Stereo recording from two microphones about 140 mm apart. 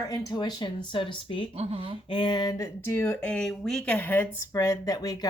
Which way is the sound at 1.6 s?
45° right (ahead or behind).